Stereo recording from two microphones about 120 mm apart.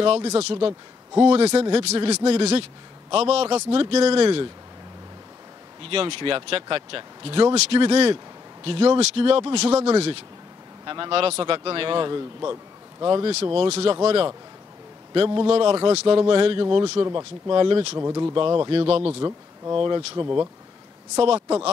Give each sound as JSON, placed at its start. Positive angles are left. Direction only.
{"t": 0.0, "sound": "speech", "side_deg": -60}
{"t": 5.9, "sound": "speech", "side_deg": -50}
{"t": 10.9, "sound": "speech", "side_deg": -45}
{"t": 13.3, "sound": "speech", "side_deg": -55}
{"t": 17.0, "sound": "speech", "side_deg": -30}
{"t": 17.9, "sound": "speech", "side_deg": -25}
{"t": 18.3, "sound": "speech", "side_deg": -45}
{"t": 19.2, "sound": "speech", "side_deg": -30}